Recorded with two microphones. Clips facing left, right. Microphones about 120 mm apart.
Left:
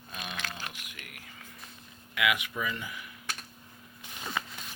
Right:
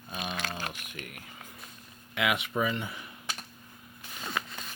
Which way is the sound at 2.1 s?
30° right (ahead or behind).